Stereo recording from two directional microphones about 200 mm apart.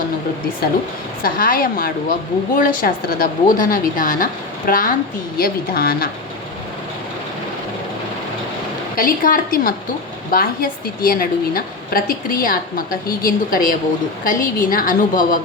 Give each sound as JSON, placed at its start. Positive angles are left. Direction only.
{"t": 1.2, "sound": "a woman's voice", "side_deg": 45}
{"t": 9.0, "sound": "a woman's voice", "side_deg": 45}